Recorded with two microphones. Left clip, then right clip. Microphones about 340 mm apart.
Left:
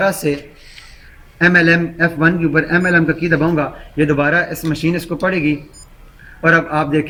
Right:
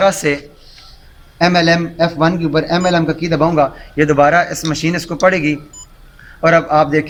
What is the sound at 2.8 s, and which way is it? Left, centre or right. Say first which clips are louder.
A man's voice: left 1 dB; centre.